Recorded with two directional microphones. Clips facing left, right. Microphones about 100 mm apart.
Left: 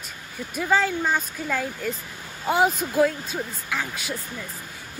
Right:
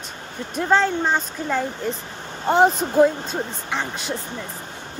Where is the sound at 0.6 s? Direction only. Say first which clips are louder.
Right 3 dB; 5° left (ahead or behind).